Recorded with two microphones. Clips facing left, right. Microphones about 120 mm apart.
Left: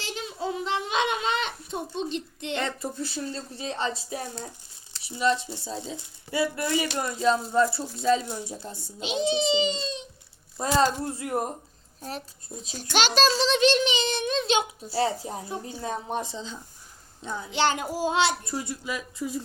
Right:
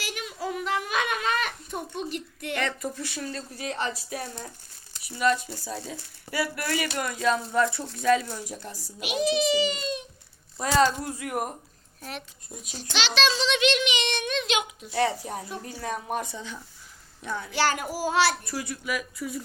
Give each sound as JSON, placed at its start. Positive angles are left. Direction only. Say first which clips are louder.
{"t": 0.0, "sound": "a child's voice", "louder": "left 1 dB", "side_deg": 25}
{"t": 12.7, "sound": "a child's voice", "louder": "left 4 dB", "side_deg": 45}